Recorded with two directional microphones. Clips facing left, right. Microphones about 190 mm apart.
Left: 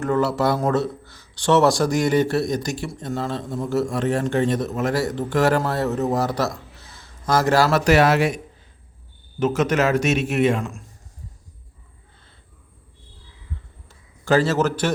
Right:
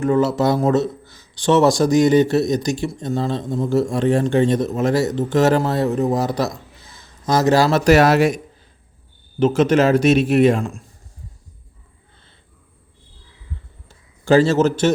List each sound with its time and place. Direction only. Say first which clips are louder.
0.0 s a man's voice: right 3 dB; 15° right (ahead or behind)
7.9 s speech: right 4 dB; 40° right (ahead or behind)
9.4 s speech: right 5 dB; 30° right (ahead or behind)
13.8 s a sound: right 5 dB; 30° right (ahead or behind)